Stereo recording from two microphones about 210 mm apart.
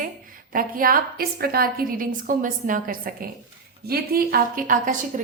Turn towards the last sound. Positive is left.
turn(degrees=-40)  # may be behind; listen again after turning